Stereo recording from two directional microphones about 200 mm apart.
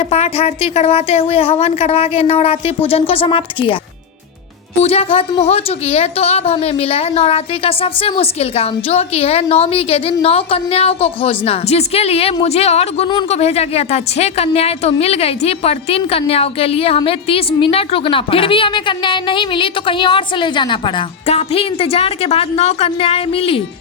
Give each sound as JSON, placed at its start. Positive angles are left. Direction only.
{"t": 0.0, "sound": "a woman's voice", "side_deg": 30}
{"t": 4.8, "sound": "a woman's voice", "side_deg": 30}